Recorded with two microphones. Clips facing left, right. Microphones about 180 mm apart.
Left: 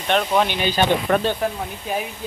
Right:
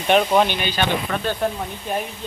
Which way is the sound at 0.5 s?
40° left (ahead or behind).